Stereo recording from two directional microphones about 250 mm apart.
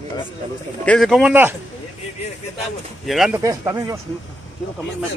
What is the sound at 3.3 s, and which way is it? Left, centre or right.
Speech, centre.